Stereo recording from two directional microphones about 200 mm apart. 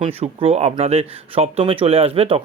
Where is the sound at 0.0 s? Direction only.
30° right (ahead or behind).